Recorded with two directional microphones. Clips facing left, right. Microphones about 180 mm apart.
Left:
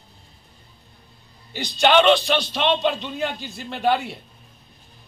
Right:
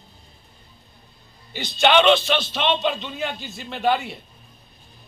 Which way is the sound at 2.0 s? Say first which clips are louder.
Left 1 dB; 10° left (ahead or behind).